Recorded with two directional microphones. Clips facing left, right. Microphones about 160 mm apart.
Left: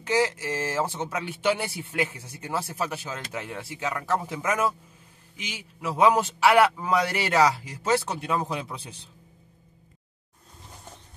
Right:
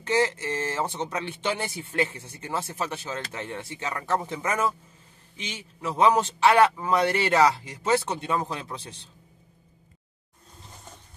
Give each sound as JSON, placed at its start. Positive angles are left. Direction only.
{"t": 0.0, "sound": "a man's voice", "side_deg": 10}
{"t": 5.8, "sound": "a man's voice", "side_deg": 10}